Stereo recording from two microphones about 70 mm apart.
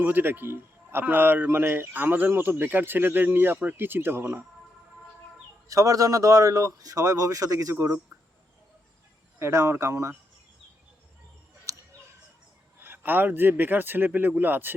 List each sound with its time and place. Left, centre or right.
0.0 s a man's voice: right
5.6 s speech: right
9.4 s speech: right
11.7 s a sound: right
12.8 s speech: right